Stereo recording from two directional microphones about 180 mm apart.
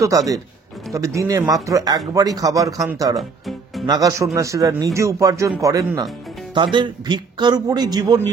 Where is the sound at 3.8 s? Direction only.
20° right (ahead or behind).